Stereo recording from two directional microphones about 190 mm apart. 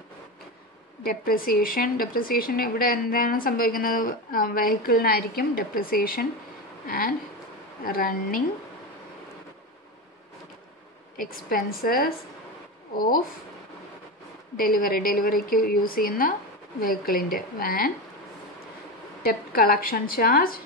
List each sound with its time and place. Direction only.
1.0 s a woman's voice: 50° left (ahead or behind)
11.4 s a woman's voice: 50° left (ahead or behind)
14.6 s a woman's voice: 50° left (ahead or behind)
19.2 s a woman's voice: 50° left (ahead or behind)